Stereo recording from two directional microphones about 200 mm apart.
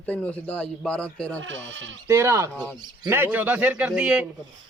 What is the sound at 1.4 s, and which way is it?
Speech, 65° right (ahead or behind).